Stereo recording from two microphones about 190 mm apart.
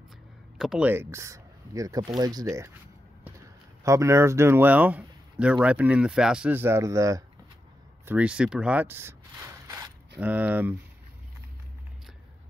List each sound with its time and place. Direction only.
0.6 s speech: 5° right (ahead or behind)